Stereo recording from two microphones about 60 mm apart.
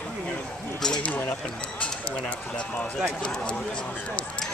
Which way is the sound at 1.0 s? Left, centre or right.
Left.